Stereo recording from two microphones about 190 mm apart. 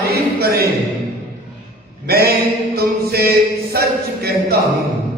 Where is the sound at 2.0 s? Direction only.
55° right (ahead or behind).